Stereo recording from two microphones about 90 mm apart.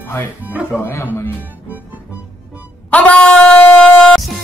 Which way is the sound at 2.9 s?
15° left (ahead or behind).